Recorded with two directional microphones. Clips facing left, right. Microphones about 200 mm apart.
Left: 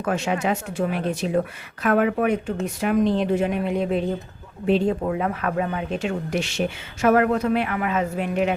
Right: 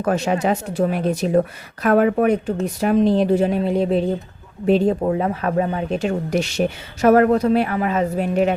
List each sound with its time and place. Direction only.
0.0 s speech: 40° right (ahead or behind)